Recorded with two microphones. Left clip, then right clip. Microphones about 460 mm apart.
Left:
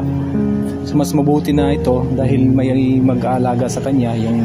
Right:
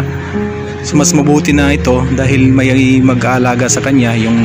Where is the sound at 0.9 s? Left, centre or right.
Left.